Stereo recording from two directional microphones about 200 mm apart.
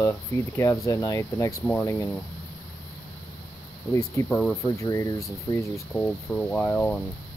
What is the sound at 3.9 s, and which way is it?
Speech, 15° left (ahead or behind).